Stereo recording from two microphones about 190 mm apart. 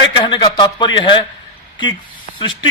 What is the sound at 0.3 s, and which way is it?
Speech, 25° left (ahead or behind).